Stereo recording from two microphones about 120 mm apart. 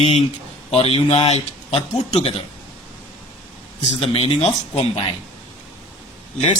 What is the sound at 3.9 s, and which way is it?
Speech, 55° left (ahead or behind).